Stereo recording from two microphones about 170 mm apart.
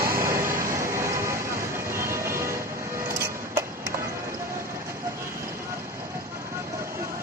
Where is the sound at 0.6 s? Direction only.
15° right (ahead or behind).